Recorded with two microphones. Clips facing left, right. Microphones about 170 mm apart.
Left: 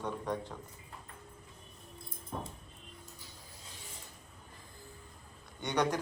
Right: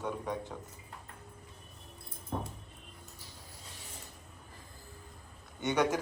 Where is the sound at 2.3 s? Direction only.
60° right (ahead or behind).